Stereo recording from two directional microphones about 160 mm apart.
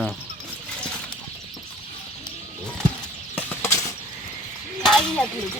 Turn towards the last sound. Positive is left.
turn(degrees=5)  # may be behind; listen again after turning